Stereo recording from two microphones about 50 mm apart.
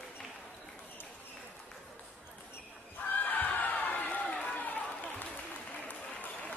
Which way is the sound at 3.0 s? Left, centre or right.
Left.